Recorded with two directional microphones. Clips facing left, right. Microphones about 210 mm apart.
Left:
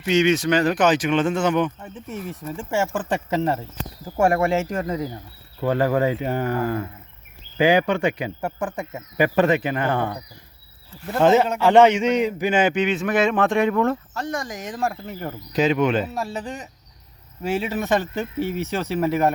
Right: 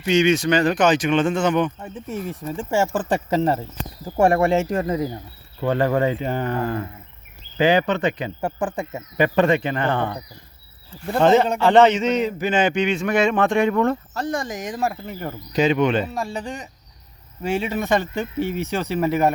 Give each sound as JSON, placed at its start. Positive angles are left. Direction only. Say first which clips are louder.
{"t": 0.0, "sound": "speech", "louder": "right 1 dB", "side_deg": 0}
{"t": 1.8, "sound": "speech", "louder": "right 3 dB", "side_deg": -35}
{"t": 5.5, "sound": "speech", "louder": "even", "side_deg": 5}
{"t": 8.4, "sound": "speech", "louder": "right 2 dB", "side_deg": -30}
{"t": 9.1, "sound": "speech", "louder": "right 1 dB", "side_deg": 5}
{"t": 11.2, "sound": "speech", "louder": "right 1 dB", "side_deg": 5}
{"t": 14.1, "sound": "speech", "louder": "right 3 dB", "side_deg": -35}